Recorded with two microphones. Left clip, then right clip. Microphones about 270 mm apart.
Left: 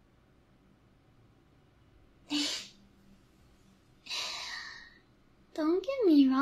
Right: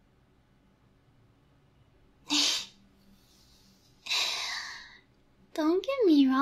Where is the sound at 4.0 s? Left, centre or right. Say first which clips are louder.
Right 7 dB; centre.